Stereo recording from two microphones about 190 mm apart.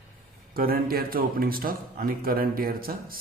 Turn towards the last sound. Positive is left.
turn(degrees=-50)  # may be behind; listen again after turning